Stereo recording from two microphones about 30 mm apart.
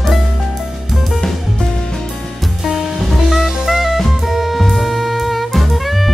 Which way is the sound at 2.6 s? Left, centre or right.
Centre.